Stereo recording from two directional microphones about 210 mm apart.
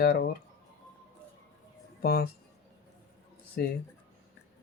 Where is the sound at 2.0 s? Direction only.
50° left (ahead or behind).